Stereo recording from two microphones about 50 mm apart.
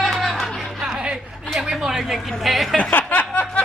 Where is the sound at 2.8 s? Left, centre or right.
Left.